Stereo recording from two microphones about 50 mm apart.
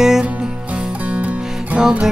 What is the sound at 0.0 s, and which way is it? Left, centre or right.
Music, centre.